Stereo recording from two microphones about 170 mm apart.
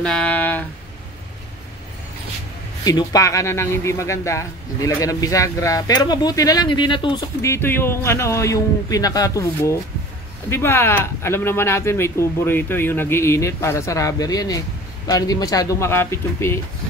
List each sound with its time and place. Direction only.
0.0 s a sound: 5° left (ahead or behind)
2.8 s a man's voice: 20° left (ahead or behind)
7.4 s a man's voice: 15° left (ahead or behind)